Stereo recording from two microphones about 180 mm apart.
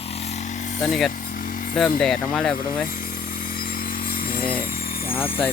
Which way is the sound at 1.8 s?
Centre (ahead or behind).